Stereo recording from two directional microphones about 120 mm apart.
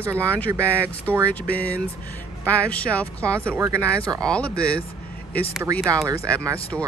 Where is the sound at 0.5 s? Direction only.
20° right (ahead or behind).